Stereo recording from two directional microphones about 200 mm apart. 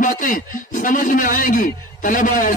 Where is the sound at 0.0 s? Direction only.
40° left (ahead or behind).